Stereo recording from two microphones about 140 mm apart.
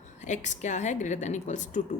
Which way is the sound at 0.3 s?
60° left (ahead or behind).